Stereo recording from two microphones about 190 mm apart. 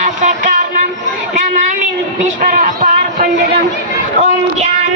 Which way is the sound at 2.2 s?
45° right (ahead or behind).